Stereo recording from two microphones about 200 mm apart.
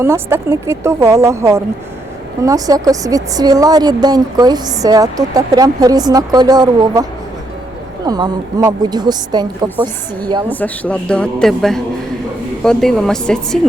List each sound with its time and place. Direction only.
0.0 s speech: 10° right (ahead or behind)
8.0 s speech: 20° right (ahead or behind)
10.5 s speech: 5° left (ahead or behind)